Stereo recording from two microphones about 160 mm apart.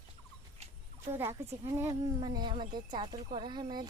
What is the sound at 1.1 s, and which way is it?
Speech, 15° right (ahead or behind).